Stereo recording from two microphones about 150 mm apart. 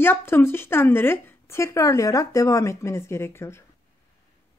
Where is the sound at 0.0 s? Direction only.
15° left (ahead or behind).